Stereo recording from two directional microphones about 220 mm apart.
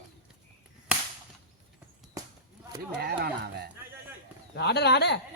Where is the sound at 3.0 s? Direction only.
45° right (ahead or behind).